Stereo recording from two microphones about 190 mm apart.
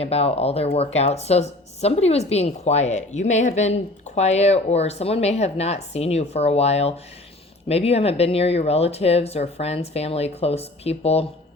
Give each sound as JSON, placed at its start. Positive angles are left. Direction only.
{"t": 0.0, "sound": "speech", "side_deg": 30}